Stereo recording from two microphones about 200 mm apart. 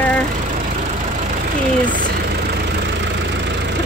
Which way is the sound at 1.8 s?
40° right (ahead or behind).